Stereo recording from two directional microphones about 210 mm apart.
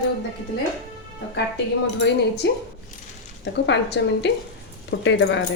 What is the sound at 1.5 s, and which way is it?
A woman's voice, 55° left (ahead or behind).